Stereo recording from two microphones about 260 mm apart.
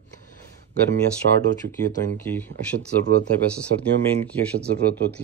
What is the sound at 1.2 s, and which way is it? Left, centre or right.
Speech, right.